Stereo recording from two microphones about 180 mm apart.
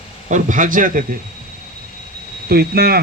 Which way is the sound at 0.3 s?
45° right (ahead or behind).